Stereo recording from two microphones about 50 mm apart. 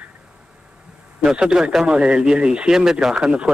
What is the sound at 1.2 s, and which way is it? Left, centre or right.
Speech, centre.